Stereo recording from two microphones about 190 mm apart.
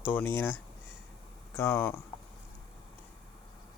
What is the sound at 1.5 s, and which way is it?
Speech, 10° left (ahead or behind).